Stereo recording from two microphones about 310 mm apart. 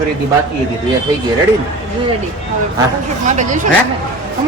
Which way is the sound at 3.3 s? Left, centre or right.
Right.